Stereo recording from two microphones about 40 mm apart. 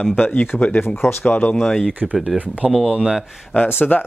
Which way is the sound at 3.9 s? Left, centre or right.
Left.